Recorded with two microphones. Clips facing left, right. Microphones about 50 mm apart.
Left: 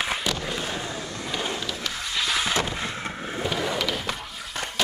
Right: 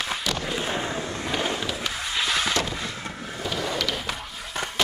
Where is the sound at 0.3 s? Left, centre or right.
Centre.